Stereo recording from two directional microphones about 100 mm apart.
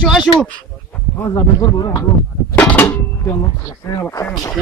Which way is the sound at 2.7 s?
20° left (ahead or behind).